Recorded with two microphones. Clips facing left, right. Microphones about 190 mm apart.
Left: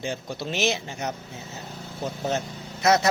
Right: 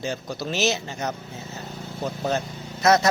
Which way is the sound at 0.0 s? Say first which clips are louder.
Right 2 dB; 20° left (ahead or behind).